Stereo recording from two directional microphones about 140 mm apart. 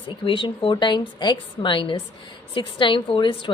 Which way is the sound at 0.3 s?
35° left (ahead or behind).